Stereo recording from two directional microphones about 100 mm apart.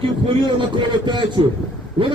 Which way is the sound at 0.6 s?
50° right (ahead or behind).